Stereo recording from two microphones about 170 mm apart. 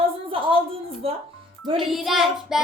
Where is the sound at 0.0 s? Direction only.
30° right (ahead or behind).